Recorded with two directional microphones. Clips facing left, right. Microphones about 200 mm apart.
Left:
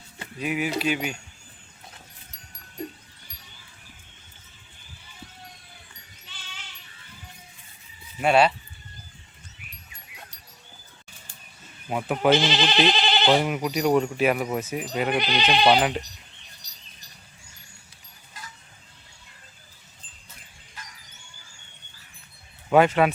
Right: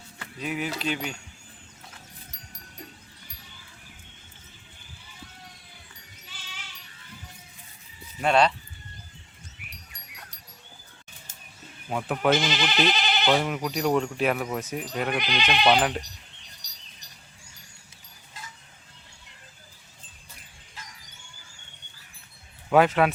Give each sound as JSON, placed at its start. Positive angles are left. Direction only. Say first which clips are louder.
{"t": 0.3, "sound": "speech", "louder": "left 4 dB", "side_deg": 10}
{"t": 8.2, "sound": "speech", "louder": "left 2 dB", "side_deg": 5}
{"t": 11.9, "sound": "speech", "louder": "left 2 dB", "side_deg": 5}
{"t": 12.4, "sound": "speech", "louder": "left 3 dB", "side_deg": 30}
{"t": 13.3, "sound": "speech", "louder": "left 3 dB", "side_deg": 10}
{"t": 15.1, "sound": "speech", "louder": "left 4 dB", "side_deg": 30}
{"t": 15.4, "sound": "speech", "louder": "left 2 dB", "side_deg": 5}
{"t": 22.7, "sound": "speech", "louder": "left 1 dB", "side_deg": 0}